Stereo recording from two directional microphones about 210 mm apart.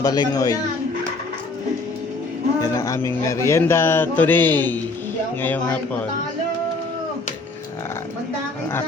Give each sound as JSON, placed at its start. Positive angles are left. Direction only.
{"t": 0.0, "sound": "a man's voice", "side_deg": 15}
{"t": 2.6, "sound": "a man's voice", "side_deg": 15}